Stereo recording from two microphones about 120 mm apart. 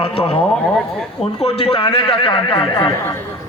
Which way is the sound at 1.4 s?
55° left (ahead or behind).